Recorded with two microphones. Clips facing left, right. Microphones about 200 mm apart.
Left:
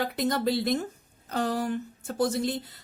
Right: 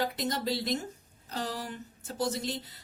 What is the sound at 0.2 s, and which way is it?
Speech, 55° left (ahead or behind).